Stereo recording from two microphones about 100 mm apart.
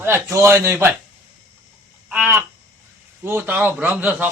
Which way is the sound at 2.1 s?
15° right (ahead or behind).